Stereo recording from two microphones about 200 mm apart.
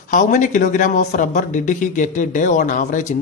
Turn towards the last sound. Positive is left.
turn(degrees=40)  # may be behind; listen again after turning